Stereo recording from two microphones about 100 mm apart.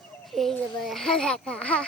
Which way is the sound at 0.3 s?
Centre (ahead or behind).